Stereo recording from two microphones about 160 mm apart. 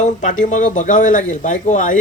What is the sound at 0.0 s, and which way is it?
Speech, 50° left (ahead or behind).